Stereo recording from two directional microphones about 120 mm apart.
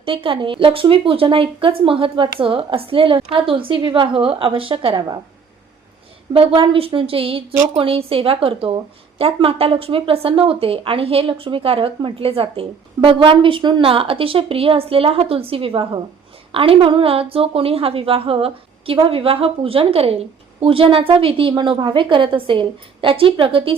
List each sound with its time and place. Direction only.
0.0 s speech: 50° right (ahead or behind)
6.3 s speech: 50° right (ahead or behind)